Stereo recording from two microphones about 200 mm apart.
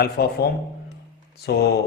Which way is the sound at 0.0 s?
50° left (ahead or behind).